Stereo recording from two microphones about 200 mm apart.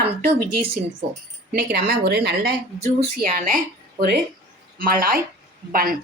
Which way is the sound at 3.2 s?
45° right (ahead or behind).